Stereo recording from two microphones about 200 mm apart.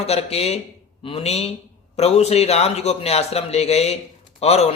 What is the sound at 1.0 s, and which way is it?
Mantra, 30° left (ahead or behind).